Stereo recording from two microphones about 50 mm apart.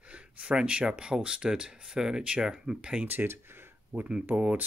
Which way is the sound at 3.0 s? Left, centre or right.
Right.